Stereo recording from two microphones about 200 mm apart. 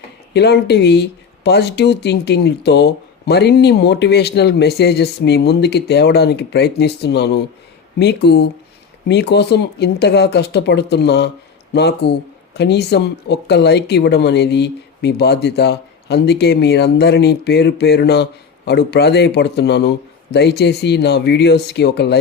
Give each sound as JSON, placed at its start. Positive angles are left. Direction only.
{"t": 0.3, "sound": "speech", "side_deg": 55}